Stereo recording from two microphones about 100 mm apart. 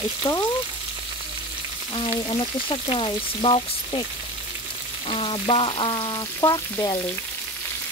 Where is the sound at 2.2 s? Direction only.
55° left (ahead or behind).